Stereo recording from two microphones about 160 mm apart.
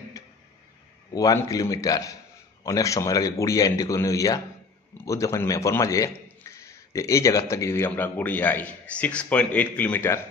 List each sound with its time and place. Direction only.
1.1 s a man's voice: 20° left (ahead or behind)